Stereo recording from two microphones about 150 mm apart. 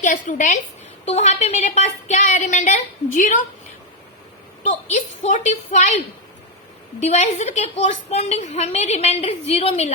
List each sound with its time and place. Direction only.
0.0 s a woman's voice: 60° left (ahead or behind)
4.6 s a woman's voice: 50° left (ahead or behind)
7.0 s a woman's voice: 50° left (ahead or behind)